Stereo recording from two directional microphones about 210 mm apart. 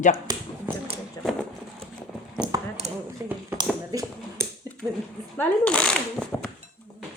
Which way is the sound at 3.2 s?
15° right (ahead or behind).